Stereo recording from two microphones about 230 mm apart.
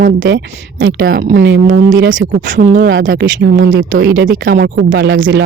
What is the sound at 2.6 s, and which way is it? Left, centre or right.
Speech, right.